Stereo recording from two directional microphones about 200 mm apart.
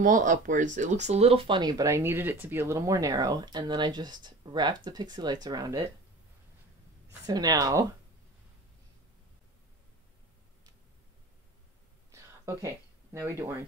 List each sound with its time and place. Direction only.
0.0 s speech: 40° right (ahead or behind); by 5.8 s 20° right (ahead or behind)
7.1 s speech: 20° right (ahead or behind)
12.1 s a sound: 15° right (ahead or behind)